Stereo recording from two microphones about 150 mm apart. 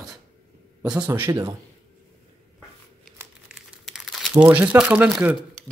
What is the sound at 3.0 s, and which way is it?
Crumpling, centre (ahead or behind).